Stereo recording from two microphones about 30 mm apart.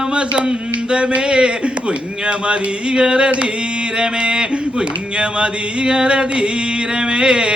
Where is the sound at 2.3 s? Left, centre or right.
Right.